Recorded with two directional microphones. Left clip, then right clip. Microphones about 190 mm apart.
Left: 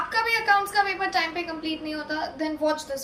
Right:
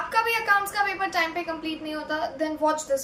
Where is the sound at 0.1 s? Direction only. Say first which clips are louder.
Even; 15° right (ahead or behind).